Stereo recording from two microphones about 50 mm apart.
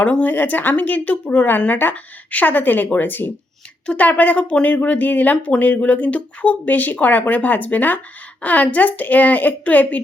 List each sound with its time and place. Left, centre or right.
0.0 s speech: left
1.3 s speech: left
3.8 s speech: left